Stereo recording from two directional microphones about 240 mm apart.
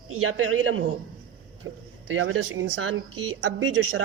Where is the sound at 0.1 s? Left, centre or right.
Right.